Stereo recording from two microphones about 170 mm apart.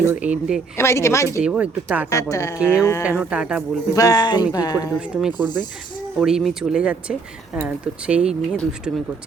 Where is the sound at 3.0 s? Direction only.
10° right (ahead or behind).